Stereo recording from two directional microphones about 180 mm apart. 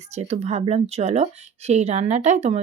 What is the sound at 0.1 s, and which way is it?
Speech, 40° right (ahead or behind).